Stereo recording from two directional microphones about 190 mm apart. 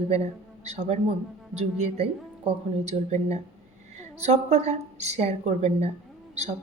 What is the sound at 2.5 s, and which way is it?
Speech, 35° right (ahead or behind).